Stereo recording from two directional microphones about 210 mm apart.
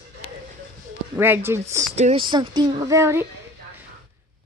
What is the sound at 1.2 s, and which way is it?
Speech, 10° right (ahead or behind).